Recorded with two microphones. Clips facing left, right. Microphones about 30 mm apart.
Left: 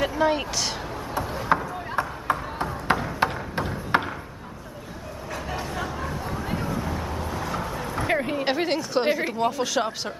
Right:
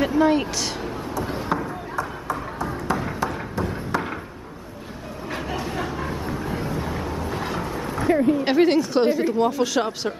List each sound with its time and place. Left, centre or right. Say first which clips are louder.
0.0 s speech: right 4 dB; centre
1.5 s a sound: left 5 dB; left
6.6 s vehicle: right 1 dB; right
7.2 s a sound: right 3 dB; right
8.1 s speech: right 7 dB; left
8.5 s speech: right 6 dB; centre
9.1 s speech: right 4 dB; centre
9.5 s speech: right 3 dB; centre